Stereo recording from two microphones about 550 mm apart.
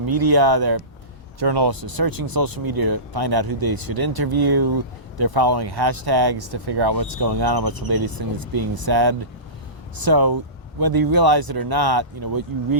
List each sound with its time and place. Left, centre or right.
0.0 s speech: right